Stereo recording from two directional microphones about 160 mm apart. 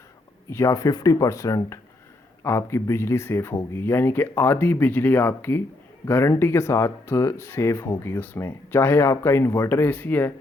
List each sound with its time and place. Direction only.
0.5 s speech: 20° left (ahead or behind)